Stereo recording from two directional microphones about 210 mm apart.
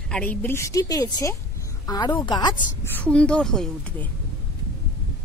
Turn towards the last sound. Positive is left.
turn(degrees=5)  # may be behind; listen again after turning